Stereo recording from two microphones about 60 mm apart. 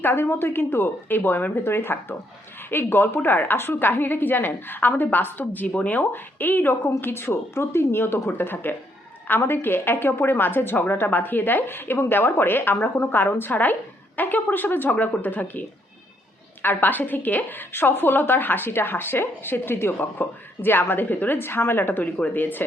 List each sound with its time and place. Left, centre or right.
0.0 s a woman's voice: left
16.6 s a woman's voice: left